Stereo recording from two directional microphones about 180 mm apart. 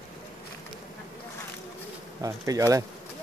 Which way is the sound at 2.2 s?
20° right (ahead or behind).